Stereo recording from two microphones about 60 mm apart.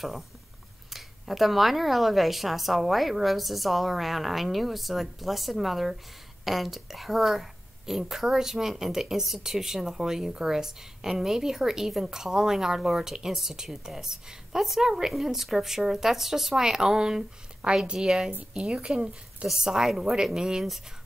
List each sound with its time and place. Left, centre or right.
0.9 s a woman's voice: centre
19.4 s a woman's voice: centre